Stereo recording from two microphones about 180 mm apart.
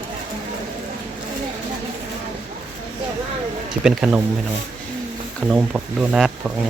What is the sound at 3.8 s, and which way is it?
Speech, 5° right (ahead or behind).